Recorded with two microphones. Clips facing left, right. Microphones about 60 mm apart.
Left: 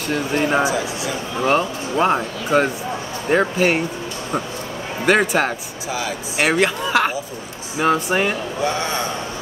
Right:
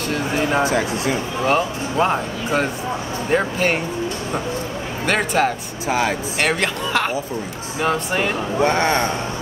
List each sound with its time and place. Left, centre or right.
0.1 s speech: centre
0.7 s speech: right
1.4 s speech: centre
5.0 s speech: centre
5.9 s speech: right
6.3 s speech: centre
8.6 s speech: right